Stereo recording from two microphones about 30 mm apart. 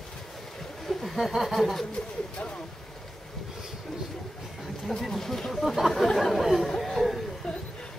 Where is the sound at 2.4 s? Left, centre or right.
Left.